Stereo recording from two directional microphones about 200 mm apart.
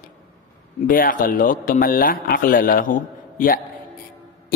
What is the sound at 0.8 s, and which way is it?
A woman's voice, 45° left (ahead or behind).